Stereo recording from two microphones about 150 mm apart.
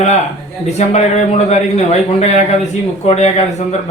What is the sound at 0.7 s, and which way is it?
A man's voice, 50° left (ahead or behind).